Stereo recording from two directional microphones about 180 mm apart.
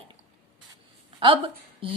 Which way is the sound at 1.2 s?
30° right (ahead or behind).